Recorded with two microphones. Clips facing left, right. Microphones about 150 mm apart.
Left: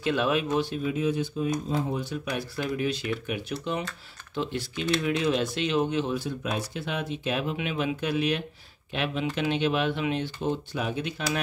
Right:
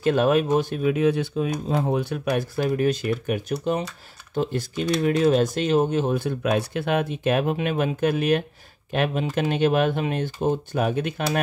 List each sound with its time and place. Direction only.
0.0 s speech: 45° right (ahead or behind)
0.8 s speech: 70° right (ahead or behind); by 11.4 s 55° right (ahead or behind)